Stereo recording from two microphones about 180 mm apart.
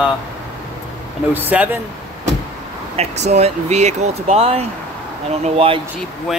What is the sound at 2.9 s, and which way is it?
Speech, 40° right (ahead or behind).